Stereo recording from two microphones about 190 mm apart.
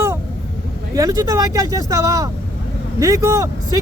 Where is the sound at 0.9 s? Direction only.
20° right (ahead or behind).